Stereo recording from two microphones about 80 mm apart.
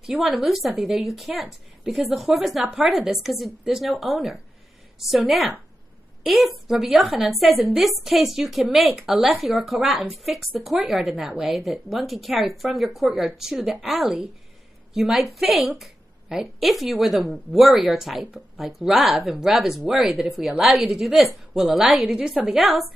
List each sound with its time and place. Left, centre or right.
0.0 s a woman's voice: centre
5.0 s a woman's voice: centre